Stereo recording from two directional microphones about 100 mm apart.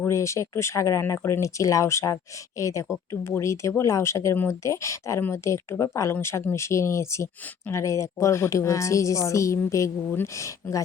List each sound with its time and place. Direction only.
0.1 s a woman's voice: 30° left (ahead or behind)